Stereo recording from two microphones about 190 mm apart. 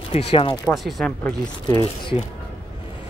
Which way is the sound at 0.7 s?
Centre (ahead or behind).